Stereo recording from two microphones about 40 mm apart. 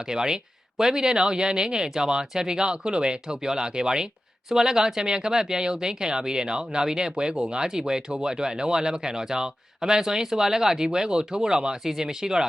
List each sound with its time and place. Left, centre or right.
0.1 s speech: centre